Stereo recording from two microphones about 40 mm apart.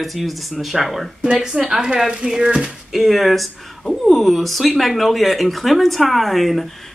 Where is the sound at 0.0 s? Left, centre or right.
Centre.